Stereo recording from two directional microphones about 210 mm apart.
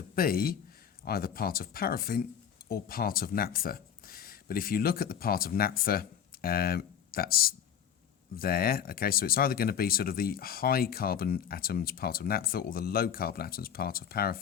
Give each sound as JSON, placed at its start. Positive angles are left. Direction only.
{"t": 0.2, "sound": "speech", "side_deg": 45}